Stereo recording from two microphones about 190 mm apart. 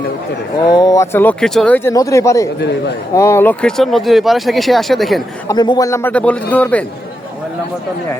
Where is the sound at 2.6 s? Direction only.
60° left (ahead or behind).